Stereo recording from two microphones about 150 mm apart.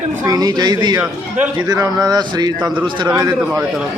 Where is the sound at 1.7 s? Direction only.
25° right (ahead or behind).